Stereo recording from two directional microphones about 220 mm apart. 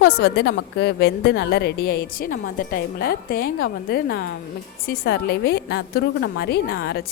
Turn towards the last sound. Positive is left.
turn(degrees=45)  # may be behind; listen again after turning